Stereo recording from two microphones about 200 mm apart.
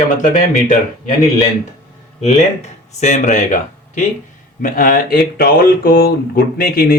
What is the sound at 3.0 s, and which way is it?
Speech, 35° left (ahead or behind).